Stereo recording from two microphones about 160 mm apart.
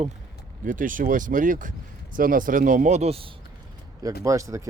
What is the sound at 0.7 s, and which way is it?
Speech, 55° right (ahead or behind).